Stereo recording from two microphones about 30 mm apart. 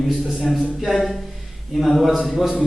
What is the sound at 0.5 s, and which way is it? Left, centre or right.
Speech, centre.